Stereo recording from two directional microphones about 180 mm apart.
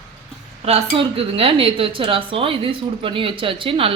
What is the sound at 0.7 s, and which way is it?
A woman's voice, 35° right (ahead or behind).